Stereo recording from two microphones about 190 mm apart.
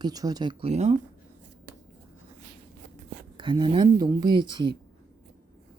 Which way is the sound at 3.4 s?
25° right (ahead or behind).